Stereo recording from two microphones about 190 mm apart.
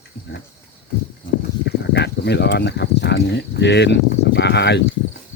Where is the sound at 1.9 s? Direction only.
60° left (ahead or behind).